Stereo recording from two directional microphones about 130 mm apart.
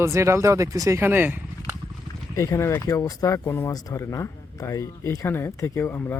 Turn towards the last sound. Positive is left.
turn(degrees=15)  # may be behind; listen again after turning